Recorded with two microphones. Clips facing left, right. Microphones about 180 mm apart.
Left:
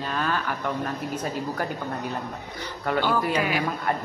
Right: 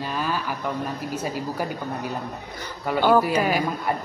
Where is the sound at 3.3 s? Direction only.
40° right (ahead or behind).